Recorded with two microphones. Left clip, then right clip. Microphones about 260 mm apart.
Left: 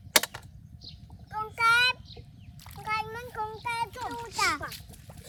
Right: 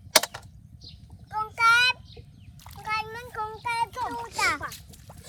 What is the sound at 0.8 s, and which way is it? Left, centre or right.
Horse, centre.